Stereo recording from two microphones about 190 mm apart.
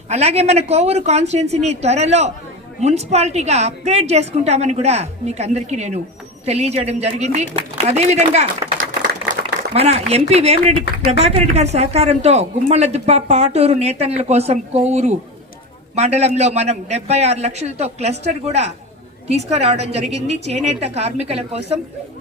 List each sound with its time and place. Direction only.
0.1 s a woman's voice: 35° right (ahead or behind)